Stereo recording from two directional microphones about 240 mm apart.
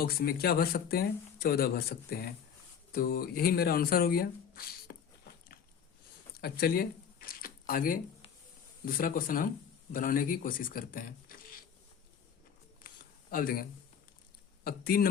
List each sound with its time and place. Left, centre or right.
0.0 s speech: left
6.4 s a sound: left
8.8 s speech: left
13.3 s speech: left